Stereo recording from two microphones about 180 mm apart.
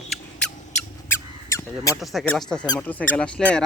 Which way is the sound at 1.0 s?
15° left (ahead or behind).